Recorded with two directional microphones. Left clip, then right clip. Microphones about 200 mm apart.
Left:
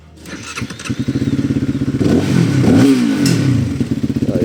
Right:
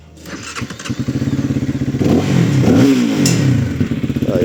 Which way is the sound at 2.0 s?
5° right (ahead or behind).